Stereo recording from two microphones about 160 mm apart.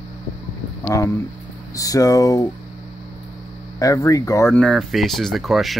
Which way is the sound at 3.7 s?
20° left (ahead or behind).